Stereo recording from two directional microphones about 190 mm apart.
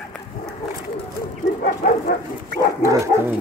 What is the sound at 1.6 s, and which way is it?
Dog, 50° left (ahead or behind).